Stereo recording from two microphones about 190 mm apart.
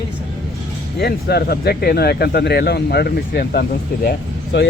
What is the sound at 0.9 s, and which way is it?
Speech, 55° left (ahead or behind).